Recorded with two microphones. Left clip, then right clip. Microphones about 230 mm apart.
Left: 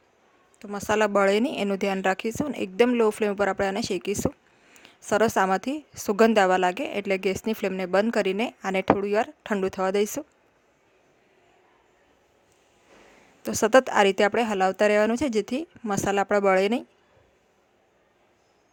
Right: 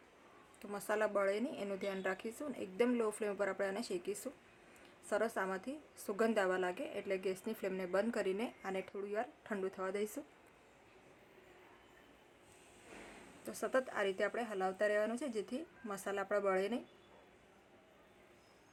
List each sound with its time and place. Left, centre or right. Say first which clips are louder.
0.6 s a woman's voice: left 13 dB; left
13.4 s a woman's voice: left 18 dB; left